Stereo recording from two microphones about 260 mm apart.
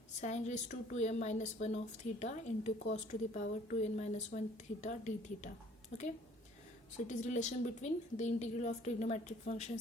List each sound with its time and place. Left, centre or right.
0.2 s speech: left